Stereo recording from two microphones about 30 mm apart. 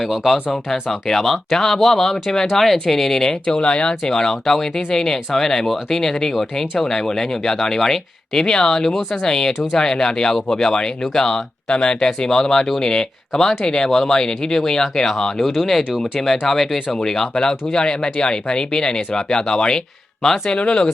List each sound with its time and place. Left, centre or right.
0.5 s speech: centre
1.2 s speech: centre
1.5 s speech: centre
3.4 s speech: left
4.0 s speech: left
11.7 s speech: left
16.2 s speech: centre
17.0 s speech: left
20.2 s speech: centre
20.6 s speech: left